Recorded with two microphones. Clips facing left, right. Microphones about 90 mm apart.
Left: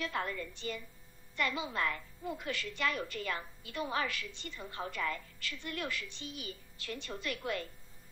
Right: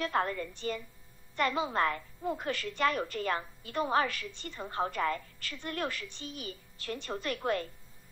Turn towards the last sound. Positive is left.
turn(degrees=-40)  # may be behind; listen again after turning